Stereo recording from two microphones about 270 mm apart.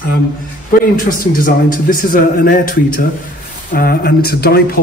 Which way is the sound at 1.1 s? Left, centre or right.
Left.